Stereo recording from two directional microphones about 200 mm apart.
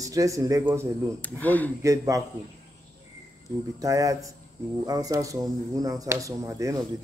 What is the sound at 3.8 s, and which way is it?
Speech, 15° right (ahead or behind).